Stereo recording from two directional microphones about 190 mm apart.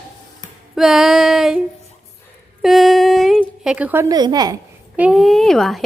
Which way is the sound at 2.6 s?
Centre (ahead or behind).